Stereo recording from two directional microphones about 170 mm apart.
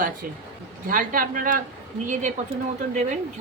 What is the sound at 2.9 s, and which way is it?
Speech, 45° right (ahead or behind).